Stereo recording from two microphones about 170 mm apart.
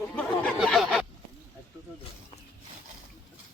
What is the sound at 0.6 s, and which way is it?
Fowl, centre (ahead or behind).